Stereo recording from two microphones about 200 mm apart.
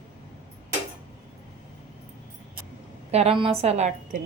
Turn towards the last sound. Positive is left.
turn(degrees=-35)  # may be behind; listen again after turning